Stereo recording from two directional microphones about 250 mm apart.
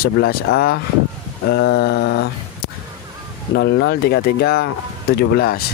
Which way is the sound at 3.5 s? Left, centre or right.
Left.